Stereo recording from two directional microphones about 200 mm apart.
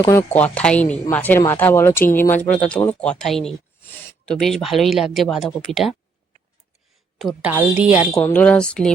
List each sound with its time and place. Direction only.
0.0 s speech: 15° left (ahead or behind)
7.2 s a woman's voice: centre (ahead or behind)
8.1 s speech: 10° left (ahead or behind)